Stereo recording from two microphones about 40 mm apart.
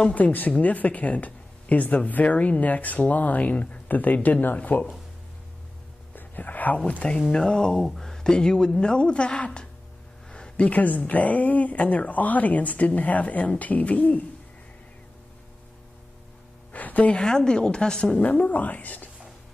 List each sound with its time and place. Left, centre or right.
0.1 s speech: left
6.1 s whispering: left
7.2 s speech: centre; by 9.7 s left
10.3 s a sound: left
10.7 s speech: left
16.7 s music: left
17.1 s speech: centre
18.2 s speech: left